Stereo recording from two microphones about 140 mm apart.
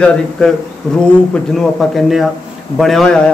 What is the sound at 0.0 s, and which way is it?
A man's voice, 5° left (ahead or behind).